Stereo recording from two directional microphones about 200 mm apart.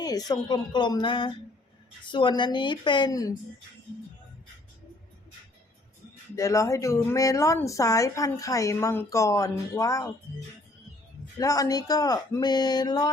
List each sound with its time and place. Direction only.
0.0 s speech: 20° left (ahead or behind)
6.3 s a woman's voice: 15° left (ahead or behind)
11.3 s speech: 15° left (ahead or behind)